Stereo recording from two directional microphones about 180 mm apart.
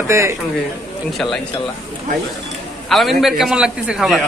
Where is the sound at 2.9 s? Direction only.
Centre (ahead or behind).